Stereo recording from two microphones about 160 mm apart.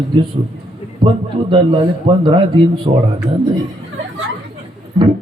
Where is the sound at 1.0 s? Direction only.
30° right (ahead or behind).